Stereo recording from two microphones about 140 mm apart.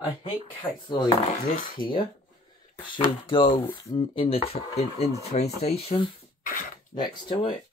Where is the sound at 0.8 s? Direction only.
35° left (ahead or behind).